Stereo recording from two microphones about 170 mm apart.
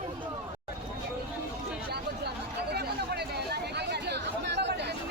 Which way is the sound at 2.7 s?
70° right (ahead or behind).